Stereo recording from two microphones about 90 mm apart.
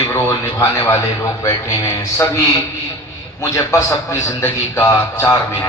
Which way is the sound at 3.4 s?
35° left (ahead or behind).